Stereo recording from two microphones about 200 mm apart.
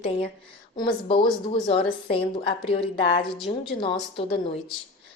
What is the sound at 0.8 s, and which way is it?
A woman's voice, 25° left (ahead or behind).